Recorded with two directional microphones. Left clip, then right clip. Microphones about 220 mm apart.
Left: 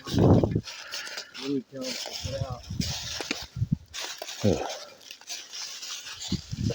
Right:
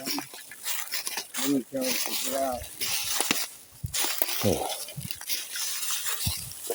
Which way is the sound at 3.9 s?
55° right (ahead or behind).